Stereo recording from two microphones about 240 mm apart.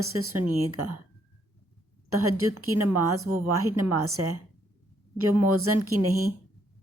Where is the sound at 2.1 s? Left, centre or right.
Right.